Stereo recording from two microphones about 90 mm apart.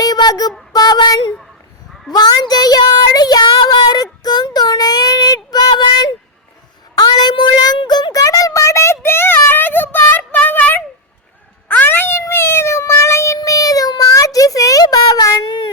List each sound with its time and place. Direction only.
0.0 s child singing: 45° left (ahead or behind)
2.1 s speech: 50° left (ahead or behind)
6.9 s child singing: 50° left (ahead or behind)
7.9 s a sound: 50° left (ahead or behind)